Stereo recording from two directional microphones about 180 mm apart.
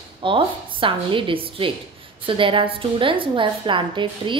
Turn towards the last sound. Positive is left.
turn(degrees=-25)  # may be behind; listen again after turning